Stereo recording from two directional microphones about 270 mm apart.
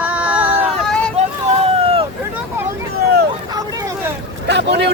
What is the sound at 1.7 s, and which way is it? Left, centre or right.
Boat, right.